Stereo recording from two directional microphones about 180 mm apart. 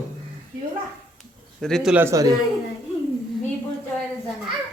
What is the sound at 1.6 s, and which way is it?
Speech, centre (ahead or behind).